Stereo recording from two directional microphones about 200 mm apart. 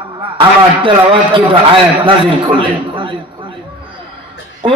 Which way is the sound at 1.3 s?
25° right (ahead or behind).